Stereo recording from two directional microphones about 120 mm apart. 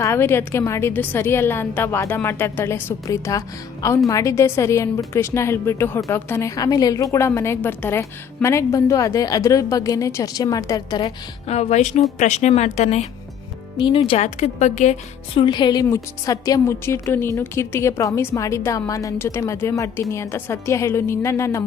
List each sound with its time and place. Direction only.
0.0 s a woman's voice: 20° left (ahead or behind)
11.4 s speech: 65° left (ahead or behind)
13.7 s speech: 45° left (ahead or behind)
14.2 s speech: 70° left (ahead or behind)
15.4 s a woman's voice: 40° left (ahead or behind)